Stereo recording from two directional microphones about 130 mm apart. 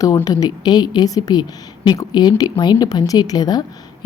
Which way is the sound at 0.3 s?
30° left (ahead or behind).